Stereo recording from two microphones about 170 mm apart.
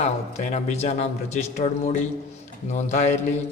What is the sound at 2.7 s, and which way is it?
Speech, 45° left (ahead or behind).